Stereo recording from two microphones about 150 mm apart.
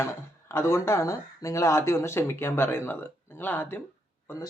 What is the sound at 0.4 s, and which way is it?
Speech, 20° left (ahead or behind).